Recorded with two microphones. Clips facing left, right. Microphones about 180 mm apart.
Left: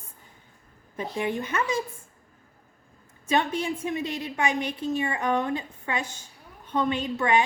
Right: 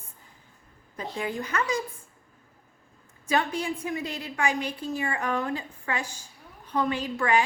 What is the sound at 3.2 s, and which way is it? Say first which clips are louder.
A woman's voice: left 1 dB; 20° left (ahead or behind).